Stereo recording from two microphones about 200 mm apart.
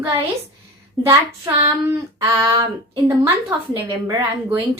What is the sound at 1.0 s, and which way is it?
A woman's voice, 15° right (ahead or behind).